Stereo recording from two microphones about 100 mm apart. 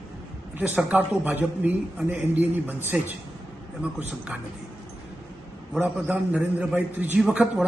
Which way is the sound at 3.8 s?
10° right (ahead or behind).